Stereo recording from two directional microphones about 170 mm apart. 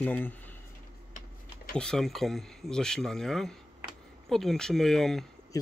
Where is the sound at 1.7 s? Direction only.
5° left (ahead or behind).